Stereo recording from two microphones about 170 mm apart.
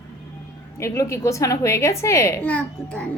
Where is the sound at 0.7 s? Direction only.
15° left (ahead or behind).